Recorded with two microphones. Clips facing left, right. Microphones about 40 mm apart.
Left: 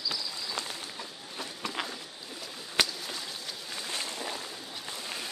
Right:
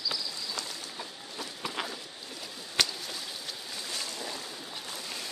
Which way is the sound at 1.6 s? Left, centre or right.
Centre.